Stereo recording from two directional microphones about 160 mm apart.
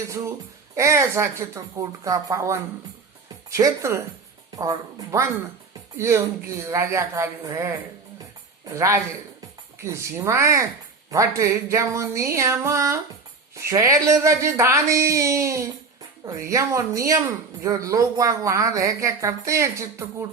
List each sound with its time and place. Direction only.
0.8 s a woman's voice: 20° right (ahead or behind)